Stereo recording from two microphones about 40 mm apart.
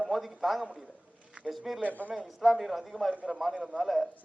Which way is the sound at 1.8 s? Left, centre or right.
Right.